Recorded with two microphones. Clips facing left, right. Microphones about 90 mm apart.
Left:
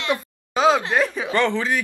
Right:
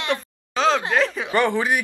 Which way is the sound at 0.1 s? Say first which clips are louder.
Left 3 dB; 10° left (ahead or behind).